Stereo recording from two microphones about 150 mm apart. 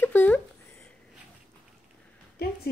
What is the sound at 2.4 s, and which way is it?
Speech, 90° left.